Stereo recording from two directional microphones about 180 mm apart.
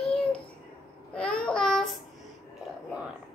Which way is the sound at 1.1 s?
5° left (ahead or behind).